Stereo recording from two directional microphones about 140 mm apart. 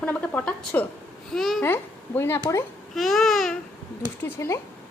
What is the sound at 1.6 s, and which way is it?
Speech, 15° left (ahead or behind).